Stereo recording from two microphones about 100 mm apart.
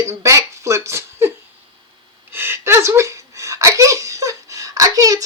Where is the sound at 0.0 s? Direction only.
30° right (ahead or behind).